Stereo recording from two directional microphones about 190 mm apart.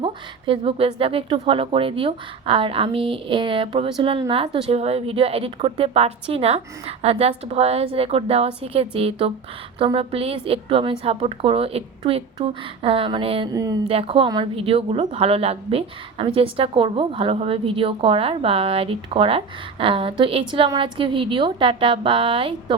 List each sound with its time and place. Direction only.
0.0 s a woman's voice: 30° right (ahead or behind)
13.9 s a woman's voice: 30° right (ahead or behind)